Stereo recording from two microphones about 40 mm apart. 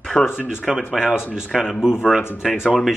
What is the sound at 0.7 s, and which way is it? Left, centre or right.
Speech, centre.